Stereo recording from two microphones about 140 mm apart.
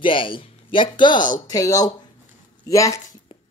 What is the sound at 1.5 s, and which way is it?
Speech, 25° left (ahead or behind).